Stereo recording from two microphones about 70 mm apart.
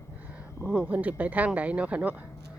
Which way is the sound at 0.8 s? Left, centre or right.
Right.